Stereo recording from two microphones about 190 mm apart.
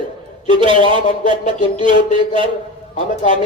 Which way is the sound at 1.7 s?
25° right (ahead or behind).